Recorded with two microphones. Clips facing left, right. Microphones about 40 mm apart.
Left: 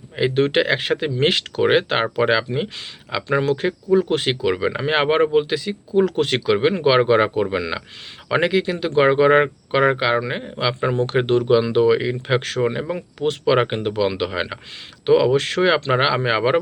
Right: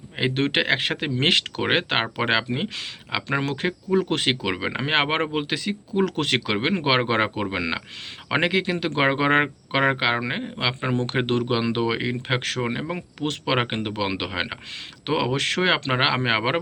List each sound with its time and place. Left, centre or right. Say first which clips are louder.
0.2 s speech: left 5 dB; right
4.5 s speech: left 3 dB; right
10.4 s speech: left 3 dB; right
10.9 s speech: left 5 dB; right